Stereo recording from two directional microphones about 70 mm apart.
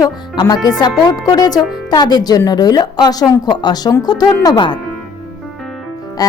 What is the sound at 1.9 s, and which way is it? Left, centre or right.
A woman's voice, left.